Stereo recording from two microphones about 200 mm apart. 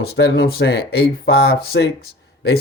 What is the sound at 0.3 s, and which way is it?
Speech, 50° left (ahead or behind).